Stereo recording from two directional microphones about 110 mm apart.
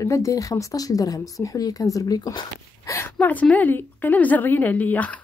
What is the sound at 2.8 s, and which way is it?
Speech, 25° left (ahead or behind).